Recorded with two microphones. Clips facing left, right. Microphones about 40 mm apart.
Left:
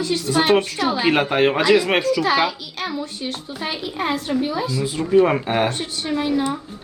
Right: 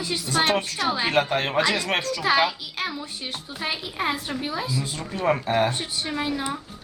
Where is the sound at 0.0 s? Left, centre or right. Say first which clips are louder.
Left 4 dB; centre.